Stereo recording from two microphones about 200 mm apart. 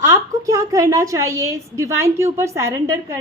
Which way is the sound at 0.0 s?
15° right (ahead or behind).